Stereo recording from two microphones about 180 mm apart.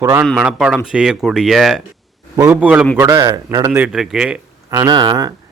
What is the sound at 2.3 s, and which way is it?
Speech, 15° right (ahead or behind).